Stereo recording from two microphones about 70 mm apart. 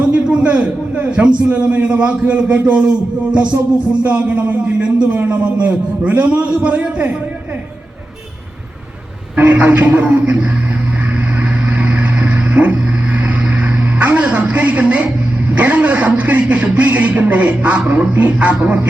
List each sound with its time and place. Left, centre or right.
0.0 s a man's voice: centre
9.3 s a man's voice: right
11.6 s vehicle: right
15.5 s a man's voice: right